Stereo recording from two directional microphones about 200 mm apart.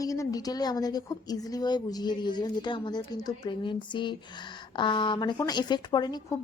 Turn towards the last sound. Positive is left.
turn(degrees=20)  # may be behind; listen again after turning